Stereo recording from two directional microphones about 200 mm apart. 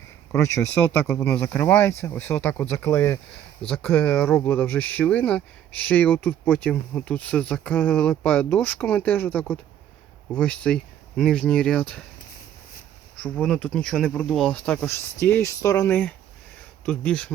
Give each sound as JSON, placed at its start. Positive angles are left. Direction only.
{"t": 0.3, "sound": "speech", "side_deg": 15}
{"t": 13.2, "sound": "speech", "side_deg": 5}